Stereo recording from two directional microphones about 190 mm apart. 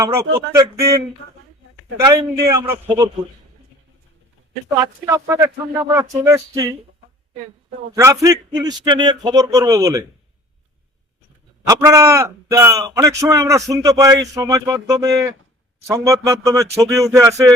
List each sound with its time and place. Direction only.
0.0 s a man's voice: 15° right (ahead or behind)
4.8 s a man's voice: 20° right (ahead or behind)
7.9 s speech: 15° right (ahead or behind)
11.7 s a man's voice: 15° right (ahead or behind)